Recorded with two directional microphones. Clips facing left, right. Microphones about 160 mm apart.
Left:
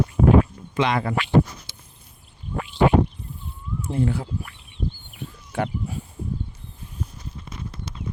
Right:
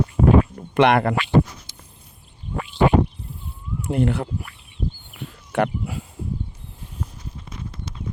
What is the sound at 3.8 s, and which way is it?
Speech, 70° right (ahead or behind).